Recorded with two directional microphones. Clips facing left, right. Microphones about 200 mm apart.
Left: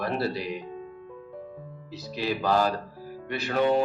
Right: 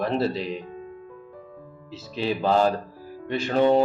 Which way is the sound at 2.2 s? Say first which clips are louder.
Right 3 dB; 25° right (ahead or behind).